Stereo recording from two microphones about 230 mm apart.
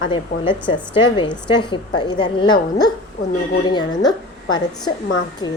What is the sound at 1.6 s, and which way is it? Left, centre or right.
A woman's voice, centre.